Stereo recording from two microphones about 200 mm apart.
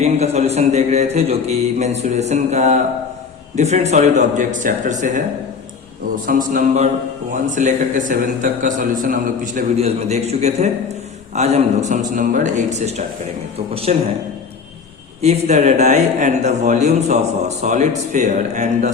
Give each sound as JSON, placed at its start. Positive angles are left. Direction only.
{"t": 0.0, "sound": "a man's voice", "side_deg": -35}
{"t": 6.2, "sound": "a man's voice", "side_deg": -45}
{"t": 15.2, "sound": "a man's voice", "side_deg": -35}